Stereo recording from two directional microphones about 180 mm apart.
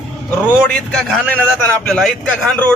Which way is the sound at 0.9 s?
5° left (ahead or behind).